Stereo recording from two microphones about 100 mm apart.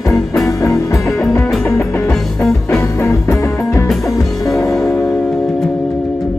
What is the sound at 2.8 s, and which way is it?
Music, 30° left (ahead or behind).